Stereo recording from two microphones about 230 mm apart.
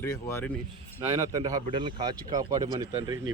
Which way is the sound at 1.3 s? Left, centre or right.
Centre.